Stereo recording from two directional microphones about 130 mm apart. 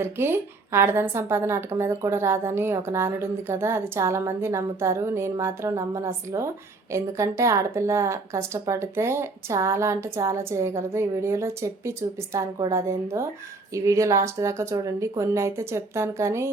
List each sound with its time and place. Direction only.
0.0 s a woman's voice: 15° right (ahead or behind)